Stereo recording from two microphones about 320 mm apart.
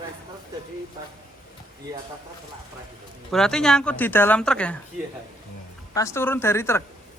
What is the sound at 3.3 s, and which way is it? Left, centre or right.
Speech, centre.